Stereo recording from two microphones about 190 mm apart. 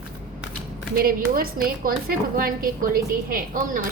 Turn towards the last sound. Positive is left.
turn(degrees=-45)  # may be behind; listen again after turning